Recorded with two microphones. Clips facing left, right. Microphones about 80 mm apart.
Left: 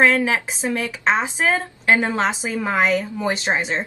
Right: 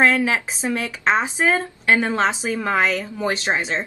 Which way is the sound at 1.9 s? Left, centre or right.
Left.